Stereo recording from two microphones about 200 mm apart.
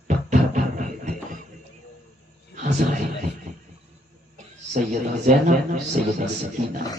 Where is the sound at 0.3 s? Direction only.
40° right (ahead or behind).